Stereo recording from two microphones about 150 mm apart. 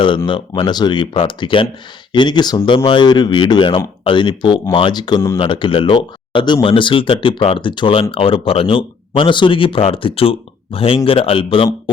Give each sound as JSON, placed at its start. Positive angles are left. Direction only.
{"t": 0.3, "sound": "speech", "side_deg": 35}